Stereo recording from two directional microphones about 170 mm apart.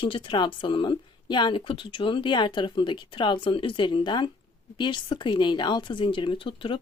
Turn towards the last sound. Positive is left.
turn(degrees=30)  # may be behind; listen again after turning